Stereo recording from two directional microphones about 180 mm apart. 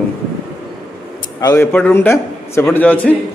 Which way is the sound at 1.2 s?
20° left (ahead or behind).